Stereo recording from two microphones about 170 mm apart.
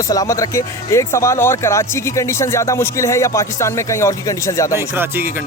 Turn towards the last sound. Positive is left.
turn(degrees=-10)  # may be behind; listen again after turning